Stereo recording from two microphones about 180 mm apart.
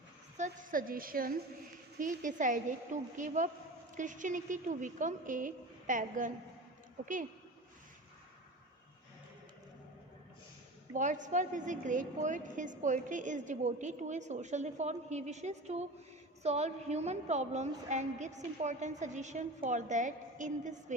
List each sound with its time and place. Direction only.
0.3 s a woman's voice: 45° right (ahead or behind)
10.9 s a woman's voice: 45° right (ahead or behind)